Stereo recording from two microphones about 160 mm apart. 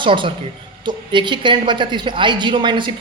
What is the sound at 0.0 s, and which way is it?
A man's voice, 30° right (ahead or behind).